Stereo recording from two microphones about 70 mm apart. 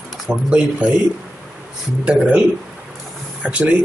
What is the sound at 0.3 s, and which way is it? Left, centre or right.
Speech, centre.